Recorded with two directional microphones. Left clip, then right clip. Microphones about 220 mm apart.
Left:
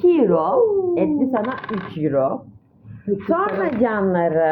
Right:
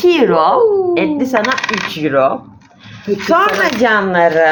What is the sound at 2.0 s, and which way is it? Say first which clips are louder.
Speech: right 6 dB; 15° right (ahead or behind).